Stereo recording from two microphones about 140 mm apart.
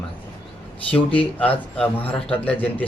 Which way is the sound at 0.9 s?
10° left (ahead or behind).